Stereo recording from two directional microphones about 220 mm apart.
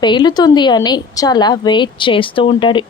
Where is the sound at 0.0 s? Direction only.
20° left (ahead or behind).